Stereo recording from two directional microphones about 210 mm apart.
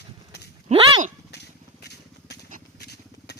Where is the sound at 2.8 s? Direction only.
50° left (ahead or behind).